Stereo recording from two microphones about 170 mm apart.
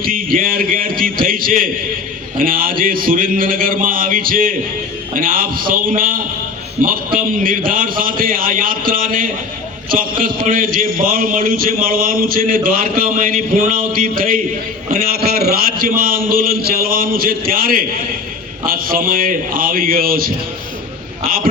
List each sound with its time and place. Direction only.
0.0 s a man's voice: 55° right (ahead or behind)